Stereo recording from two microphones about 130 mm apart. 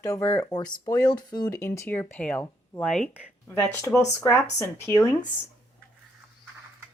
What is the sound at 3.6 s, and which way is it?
A woman's voice, 15° left (ahead or behind).